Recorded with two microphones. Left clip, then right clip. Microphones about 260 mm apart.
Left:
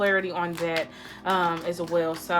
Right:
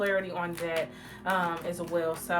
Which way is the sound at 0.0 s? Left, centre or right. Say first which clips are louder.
Left 5 dB; left.